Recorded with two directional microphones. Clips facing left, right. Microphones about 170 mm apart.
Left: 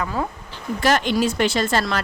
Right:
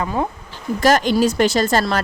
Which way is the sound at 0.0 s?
25° right (ahead or behind).